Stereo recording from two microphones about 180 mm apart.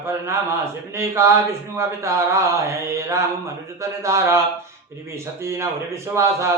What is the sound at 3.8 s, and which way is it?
Speech, 15° right (ahead or behind).